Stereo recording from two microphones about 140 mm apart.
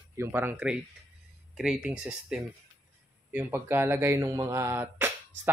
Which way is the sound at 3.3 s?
20° right (ahead or behind).